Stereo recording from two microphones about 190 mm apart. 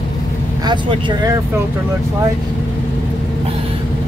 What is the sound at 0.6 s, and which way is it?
Speech, 25° right (ahead or behind).